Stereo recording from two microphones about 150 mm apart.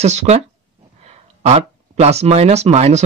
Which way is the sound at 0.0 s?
45° right (ahead or behind).